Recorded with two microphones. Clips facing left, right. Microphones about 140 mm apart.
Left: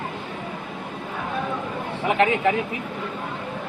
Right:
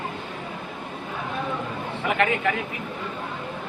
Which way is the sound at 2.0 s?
30° left (ahead or behind).